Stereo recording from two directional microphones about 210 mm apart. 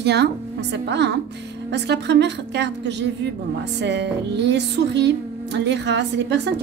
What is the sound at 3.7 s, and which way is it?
Speech, 55° right (ahead or behind).